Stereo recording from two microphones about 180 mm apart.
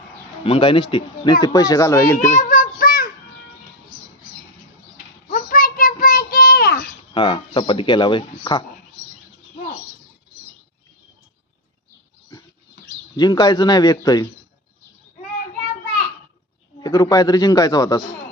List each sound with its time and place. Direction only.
0.4 s speech: 30° left (ahead or behind)
2.1 s child singing: 50° left (ahead or behind)
5.3 s child singing: 50° left (ahead or behind)
7.1 s speech: 30° left (ahead or behind)
13.1 s speech: 20° left (ahead or behind)
16.8 s speech: 20° left (ahead or behind)